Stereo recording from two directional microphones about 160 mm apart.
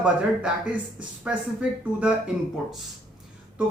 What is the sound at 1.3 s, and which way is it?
Speech, 5° right (ahead or behind).